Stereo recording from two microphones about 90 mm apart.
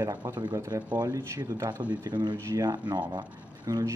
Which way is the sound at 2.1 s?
55° right (ahead or behind).